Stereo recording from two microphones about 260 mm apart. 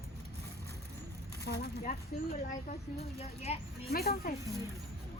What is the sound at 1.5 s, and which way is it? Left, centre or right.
Speech, left.